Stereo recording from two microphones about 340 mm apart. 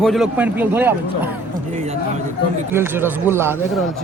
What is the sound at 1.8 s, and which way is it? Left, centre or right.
Speech, centre.